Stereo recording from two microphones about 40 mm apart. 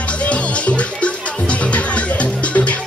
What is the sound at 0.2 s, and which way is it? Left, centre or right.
Music, left.